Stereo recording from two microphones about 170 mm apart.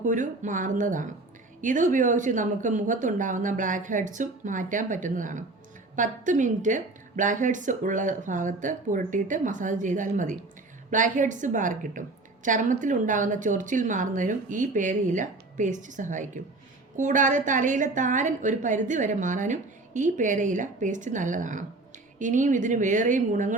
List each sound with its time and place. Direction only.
0.0 s a woman's voice: 50° right (ahead or behind)